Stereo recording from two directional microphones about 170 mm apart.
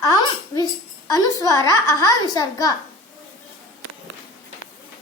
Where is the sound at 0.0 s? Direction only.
20° left (ahead or behind).